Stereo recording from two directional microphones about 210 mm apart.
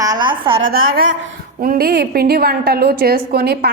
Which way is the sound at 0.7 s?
45° right (ahead or behind).